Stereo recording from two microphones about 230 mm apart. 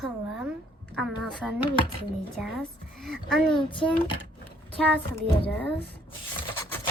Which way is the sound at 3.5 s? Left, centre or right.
Left.